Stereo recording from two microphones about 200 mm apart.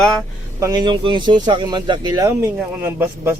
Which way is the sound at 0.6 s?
20° right (ahead or behind).